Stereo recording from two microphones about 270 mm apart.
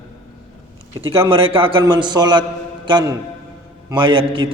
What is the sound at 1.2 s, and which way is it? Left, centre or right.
A man's voice, right.